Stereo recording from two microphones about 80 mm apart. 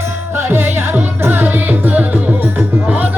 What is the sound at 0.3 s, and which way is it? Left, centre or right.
Music, right.